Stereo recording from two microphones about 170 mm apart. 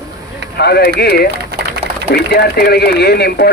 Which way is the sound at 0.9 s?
65° left (ahead or behind).